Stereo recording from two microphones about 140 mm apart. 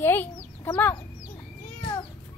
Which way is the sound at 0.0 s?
15° left (ahead or behind).